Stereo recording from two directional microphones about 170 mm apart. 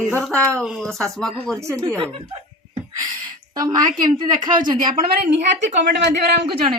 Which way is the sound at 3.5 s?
25° right (ahead or behind).